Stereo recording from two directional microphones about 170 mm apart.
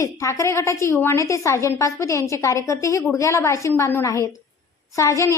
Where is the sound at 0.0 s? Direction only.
15° left (ahead or behind).